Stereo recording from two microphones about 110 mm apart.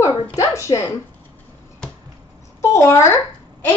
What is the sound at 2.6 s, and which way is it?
Speech, 25° left (ahead or behind).